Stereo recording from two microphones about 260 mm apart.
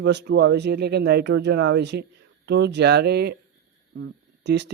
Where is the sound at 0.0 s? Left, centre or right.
Right.